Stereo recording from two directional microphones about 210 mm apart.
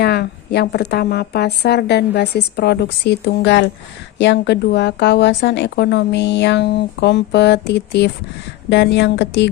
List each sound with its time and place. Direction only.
0.0 s a woman's voice: 50° left (ahead or behind)